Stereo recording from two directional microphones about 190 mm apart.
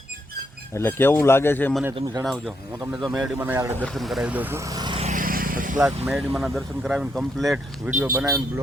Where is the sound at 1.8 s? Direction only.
15° right (ahead or behind).